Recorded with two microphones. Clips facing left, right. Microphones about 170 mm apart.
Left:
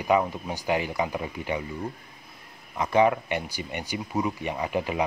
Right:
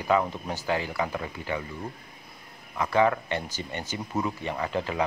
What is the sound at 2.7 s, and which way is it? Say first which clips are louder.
Speech: left 2 dB; 20° left (ahead or behind).